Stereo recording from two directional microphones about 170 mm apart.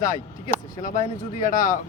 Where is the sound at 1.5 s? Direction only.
55° left (ahead or behind).